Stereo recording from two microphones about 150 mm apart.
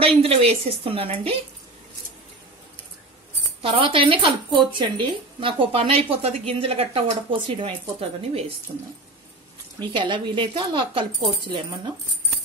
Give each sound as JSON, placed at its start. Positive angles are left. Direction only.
{"t": 0.0, "sound": "speech", "side_deg": -40}
{"t": 3.6, "sound": "speech", "side_deg": -40}
{"t": 9.8, "sound": "speech", "side_deg": -30}